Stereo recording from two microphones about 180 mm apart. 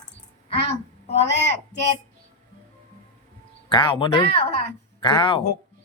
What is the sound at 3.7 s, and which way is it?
Speech, 25° left (ahead or behind).